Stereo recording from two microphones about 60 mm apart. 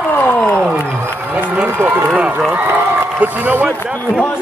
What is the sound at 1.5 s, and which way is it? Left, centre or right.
Speech, right.